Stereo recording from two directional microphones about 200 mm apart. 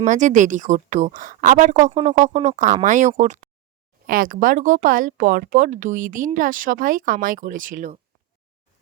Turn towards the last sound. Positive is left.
turn(degrees=-40)  # may be behind; listen again after turning